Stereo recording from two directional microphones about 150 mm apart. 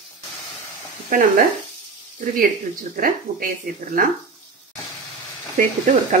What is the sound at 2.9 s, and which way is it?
Speech, 70° right (ahead or behind).